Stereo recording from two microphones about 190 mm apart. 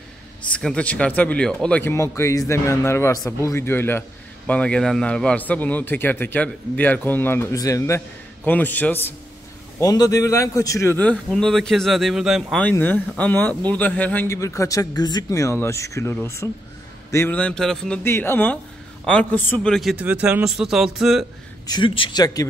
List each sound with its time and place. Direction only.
0.5 s a man's voice: 5° left (ahead or behind)
21.6 s a man's voice: 25° left (ahead or behind)